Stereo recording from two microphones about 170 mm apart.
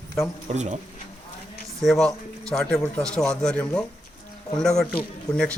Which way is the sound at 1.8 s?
Centre (ahead or behind).